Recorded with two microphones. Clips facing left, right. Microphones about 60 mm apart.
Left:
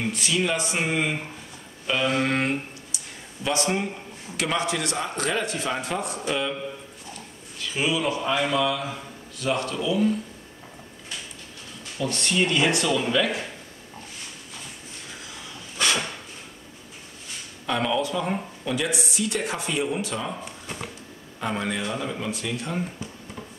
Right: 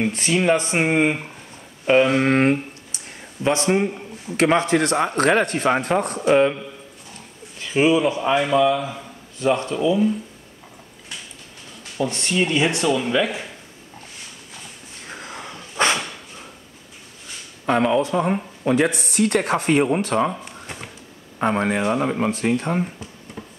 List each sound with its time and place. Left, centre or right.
0.0 s speech: right
4.4 s speech: right
7.5 s speech: right
12.0 s speech: right
15.0 s wheeze: right
17.6 s speech: right
21.4 s speech: right